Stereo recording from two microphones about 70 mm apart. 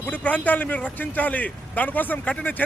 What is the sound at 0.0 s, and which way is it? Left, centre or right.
Speech, left.